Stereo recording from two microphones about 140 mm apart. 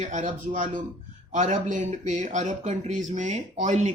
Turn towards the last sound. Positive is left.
turn(degrees=-55)  # may be behind; listen again after turning